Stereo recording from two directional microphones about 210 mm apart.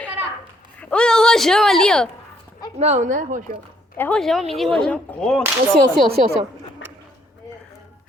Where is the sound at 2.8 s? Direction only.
35° right (ahead or behind).